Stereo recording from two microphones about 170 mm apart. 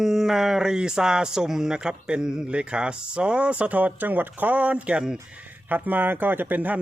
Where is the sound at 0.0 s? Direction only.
Centre (ahead or behind).